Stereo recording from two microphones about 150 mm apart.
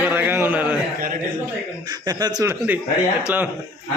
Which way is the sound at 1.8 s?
25° right (ahead or behind).